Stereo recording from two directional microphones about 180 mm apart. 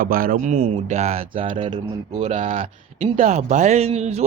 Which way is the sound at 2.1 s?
40° right (ahead or behind).